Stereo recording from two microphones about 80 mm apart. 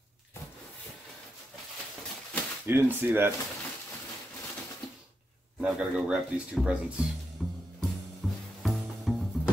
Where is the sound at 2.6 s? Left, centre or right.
Right.